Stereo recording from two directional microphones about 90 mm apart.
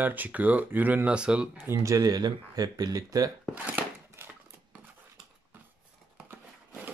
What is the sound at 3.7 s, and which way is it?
Scissors, 20° right (ahead or behind).